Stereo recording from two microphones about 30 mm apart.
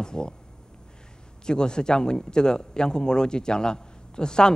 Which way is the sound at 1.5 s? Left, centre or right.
Left.